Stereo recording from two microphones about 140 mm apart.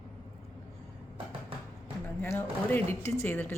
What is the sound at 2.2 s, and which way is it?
Speech, 15° left (ahead or behind).